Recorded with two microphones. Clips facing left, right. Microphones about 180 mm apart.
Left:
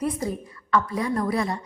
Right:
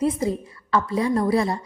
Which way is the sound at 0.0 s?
25° right (ahead or behind).